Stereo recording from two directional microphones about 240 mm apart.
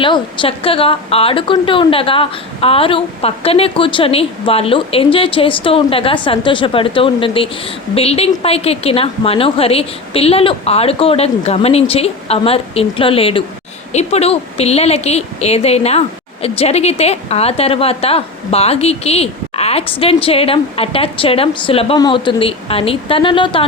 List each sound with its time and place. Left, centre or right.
0.0 s a woman's voice: left